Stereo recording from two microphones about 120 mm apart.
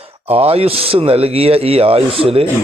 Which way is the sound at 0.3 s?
55° right (ahead or behind).